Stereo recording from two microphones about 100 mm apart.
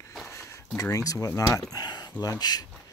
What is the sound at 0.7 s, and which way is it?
Speech, 35° left (ahead or behind).